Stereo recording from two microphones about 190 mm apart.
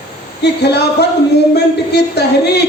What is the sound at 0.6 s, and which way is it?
A man's voice, 60° left (ahead or behind).